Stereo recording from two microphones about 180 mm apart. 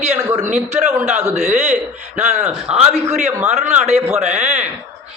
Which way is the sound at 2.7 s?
35° right (ahead or behind).